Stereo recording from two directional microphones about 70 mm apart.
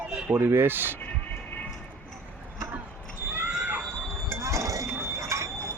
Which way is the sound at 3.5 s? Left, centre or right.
Centre.